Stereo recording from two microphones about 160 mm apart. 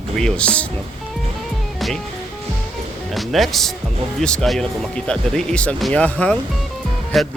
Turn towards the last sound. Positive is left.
turn(degrees=0)  # may be behind; listen again after turning